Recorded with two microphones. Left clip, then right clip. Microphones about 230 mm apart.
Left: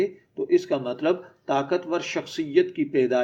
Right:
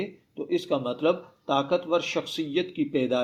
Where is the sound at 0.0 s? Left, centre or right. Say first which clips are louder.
Left 8 dB; right.